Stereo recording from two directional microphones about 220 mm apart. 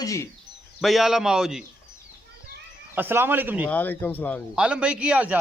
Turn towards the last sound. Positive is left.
turn(degrees=-5)  # may be behind; listen again after turning